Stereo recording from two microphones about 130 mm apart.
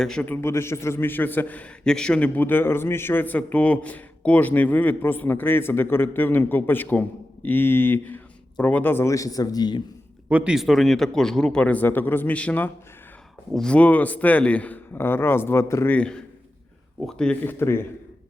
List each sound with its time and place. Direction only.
0.0 s a man's voice: 5° left (ahead or behind)
0.4 s a man's voice: 20° left (ahead or behind)
10.2 s a man's voice: 10° right (ahead or behind); by 17.5 s 5° left (ahead or behind)
17.6 s a man's voice: 20° left (ahead or behind)